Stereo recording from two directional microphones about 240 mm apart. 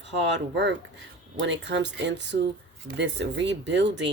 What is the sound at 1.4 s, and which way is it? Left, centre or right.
Speech, right.